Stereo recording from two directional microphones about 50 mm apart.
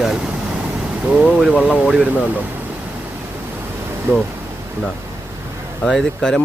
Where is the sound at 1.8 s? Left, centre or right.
Right.